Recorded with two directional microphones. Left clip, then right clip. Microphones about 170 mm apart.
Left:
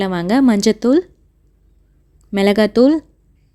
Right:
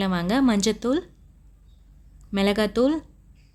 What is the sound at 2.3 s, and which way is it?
Speech, 35° left (ahead or behind).